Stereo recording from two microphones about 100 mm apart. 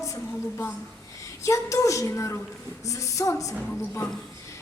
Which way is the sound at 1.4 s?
30° left (ahead or behind).